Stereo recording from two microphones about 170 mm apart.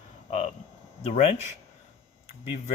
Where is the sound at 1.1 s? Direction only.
40° left (ahead or behind).